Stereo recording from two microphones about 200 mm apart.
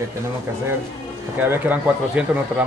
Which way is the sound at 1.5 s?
10° right (ahead or behind).